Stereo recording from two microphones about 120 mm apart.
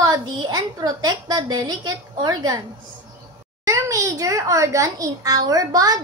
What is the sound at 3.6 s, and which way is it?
A child's voice, 25° right (ahead or behind).